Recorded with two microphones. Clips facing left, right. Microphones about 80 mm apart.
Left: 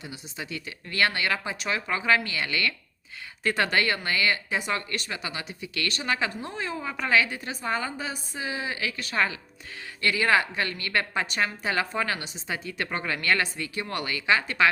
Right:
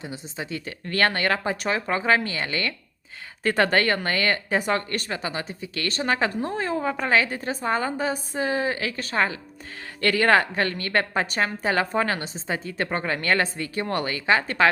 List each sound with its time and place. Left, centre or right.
0.0 s speech: right
10.0 s speech: right